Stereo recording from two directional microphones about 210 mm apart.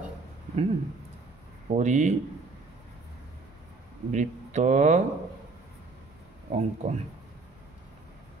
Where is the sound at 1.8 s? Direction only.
35° right (ahead or behind).